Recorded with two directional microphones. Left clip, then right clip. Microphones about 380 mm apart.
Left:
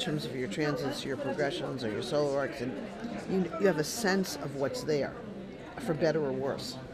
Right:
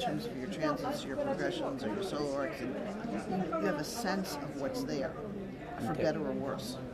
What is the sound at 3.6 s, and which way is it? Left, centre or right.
Speech, left.